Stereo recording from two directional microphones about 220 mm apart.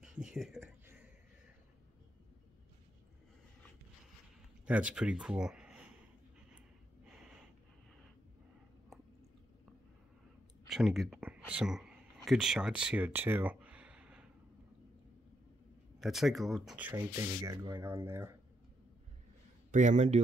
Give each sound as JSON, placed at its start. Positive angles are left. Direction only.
{"t": 0.0, "sound": "a sound", "side_deg": -5}
{"t": 4.6, "sound": "speech", "side_deg": -5}
{"t": 8.9, "sound": "squish", "side_deg": 0}
{"t": 10.7, "sound": "speech", "side_deg": 0}
{"t": 16.0, "sound": "speech", "side_deg": 0}
{"t": 19.7, "sound": "a man's voice", "side_deg": -35}